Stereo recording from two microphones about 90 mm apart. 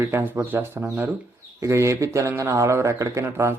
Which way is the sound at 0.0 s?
25° right (ahead or behind).